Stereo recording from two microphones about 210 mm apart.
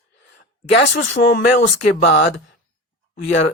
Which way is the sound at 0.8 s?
60° left (ahead or behind).